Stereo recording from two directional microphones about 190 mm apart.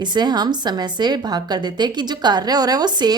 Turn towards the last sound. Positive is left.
turn(degrees=-20)  # may be behind; listen again after turning